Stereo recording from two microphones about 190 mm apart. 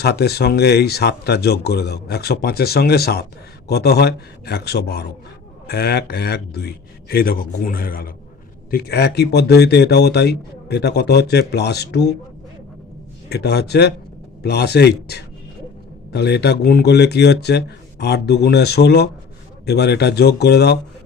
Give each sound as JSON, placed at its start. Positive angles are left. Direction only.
{"t": 0.0, "sound": "a man's voice", "side_deg": 60}
{"t": 13.3, "sound": "speech", "side_deg": 60}